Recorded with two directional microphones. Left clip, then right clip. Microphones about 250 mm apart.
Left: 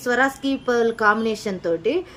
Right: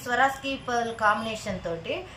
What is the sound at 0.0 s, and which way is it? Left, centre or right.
Speech, left.